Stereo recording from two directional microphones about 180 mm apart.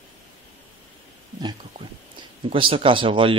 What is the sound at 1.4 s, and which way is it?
A man's voice, 25° right (ahead or behind).